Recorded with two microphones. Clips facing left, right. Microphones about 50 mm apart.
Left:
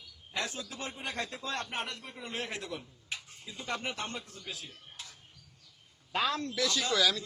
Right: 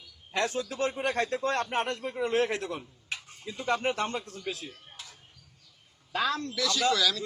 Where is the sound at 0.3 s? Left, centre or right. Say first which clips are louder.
Right 8 dB; right.